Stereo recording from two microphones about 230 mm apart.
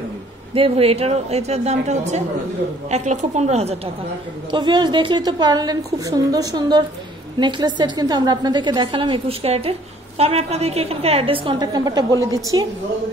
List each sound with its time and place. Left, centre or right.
0.6 s a woman's voice: right